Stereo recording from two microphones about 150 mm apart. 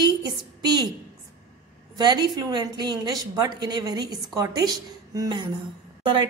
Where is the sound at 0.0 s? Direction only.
25° right (ahead or behind).